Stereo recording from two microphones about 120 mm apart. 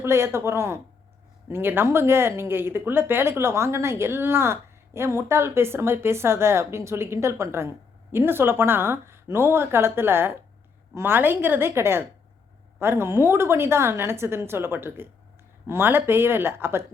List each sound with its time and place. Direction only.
0.0 s speech: 20° right (ahead or behind)